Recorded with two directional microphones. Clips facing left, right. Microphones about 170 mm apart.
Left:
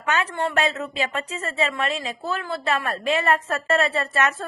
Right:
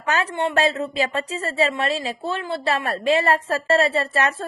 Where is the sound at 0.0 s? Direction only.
35° right (ahead or behind).